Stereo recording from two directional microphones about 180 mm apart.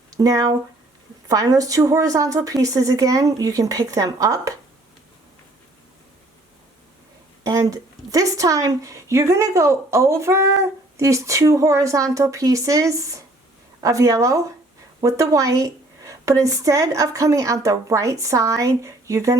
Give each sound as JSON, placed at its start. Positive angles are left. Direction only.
{"t": 0.1, "sound": "a woman's voice", "side_deg": -20}
{"t": 7.4, "sound": "a woman's voice", "side_deg": -20}